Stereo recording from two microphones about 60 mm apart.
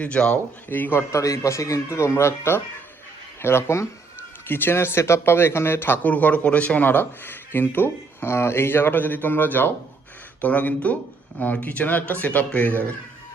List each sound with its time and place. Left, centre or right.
0.0 s speech: centre
0.7 s speech: left
0.9 s speech: left